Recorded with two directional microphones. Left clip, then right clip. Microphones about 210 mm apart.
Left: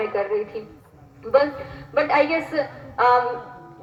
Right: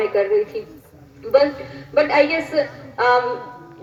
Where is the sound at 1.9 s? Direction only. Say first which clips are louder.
Right 3 dB; 35° right (ahead or behind).